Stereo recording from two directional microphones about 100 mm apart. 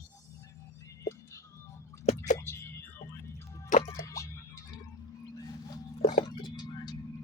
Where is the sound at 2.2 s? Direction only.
25° left (ahead or behind).